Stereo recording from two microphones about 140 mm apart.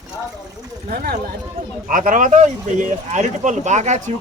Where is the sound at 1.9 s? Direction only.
75° right (ahead or behind).